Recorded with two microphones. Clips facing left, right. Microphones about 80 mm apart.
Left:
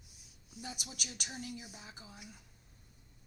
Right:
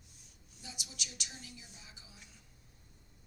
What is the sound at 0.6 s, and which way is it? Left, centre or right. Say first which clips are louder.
A woman's voice: left 4 dB; left.